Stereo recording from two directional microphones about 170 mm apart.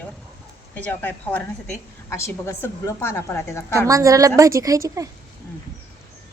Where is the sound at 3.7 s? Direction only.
20° right (ahead or behind).